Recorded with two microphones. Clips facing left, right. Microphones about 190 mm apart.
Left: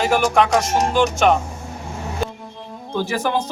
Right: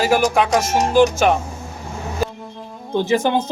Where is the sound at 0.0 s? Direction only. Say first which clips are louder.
Right 1 dB; 5° right (ahead or behind).